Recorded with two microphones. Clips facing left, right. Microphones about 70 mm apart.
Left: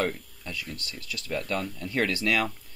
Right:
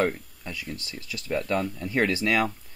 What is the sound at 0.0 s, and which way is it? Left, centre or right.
Speech, centre.